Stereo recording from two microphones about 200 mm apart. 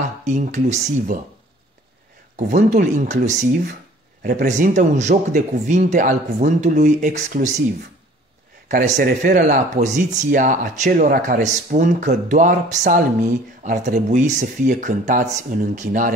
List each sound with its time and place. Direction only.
0.2 s speech: 35° right (ahead or behind)
2.3 s speech: 40° right (ahead or behind)
8.6 s speech: 40° right (ahead or behind)